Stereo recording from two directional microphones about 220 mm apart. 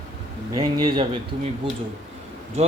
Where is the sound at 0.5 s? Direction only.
20° right (ahead or behind).